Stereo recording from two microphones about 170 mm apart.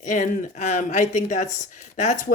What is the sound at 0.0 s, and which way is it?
Speech, 45° left (ahead or behind).